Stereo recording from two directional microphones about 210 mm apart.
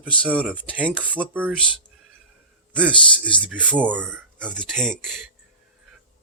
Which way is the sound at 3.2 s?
5° right (ahead or behind).